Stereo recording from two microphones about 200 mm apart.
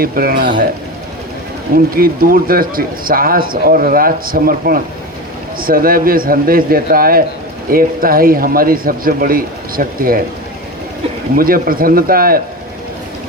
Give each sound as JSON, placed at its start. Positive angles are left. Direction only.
{"t": 0.0, "sound": "a man's voice", "side_deg": -45}
{"t": 2.0, "sound": "a man's voice", "side_deg": -45}
{"t": 11.3, "sound": "a man's voice", "side_deg": -45}